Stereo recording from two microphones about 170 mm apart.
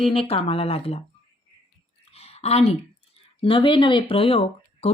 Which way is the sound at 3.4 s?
30° left (ahead or behind).